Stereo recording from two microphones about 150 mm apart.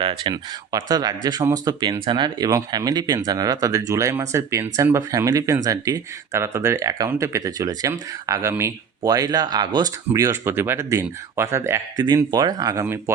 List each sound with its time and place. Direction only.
0.0 s speech: 30° right (ahead or behind)